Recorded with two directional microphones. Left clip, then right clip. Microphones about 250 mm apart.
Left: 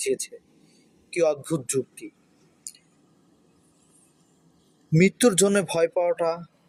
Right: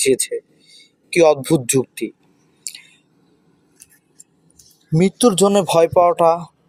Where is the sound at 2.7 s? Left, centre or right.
Right.